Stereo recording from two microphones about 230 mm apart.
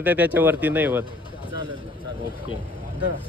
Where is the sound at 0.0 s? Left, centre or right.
Centre.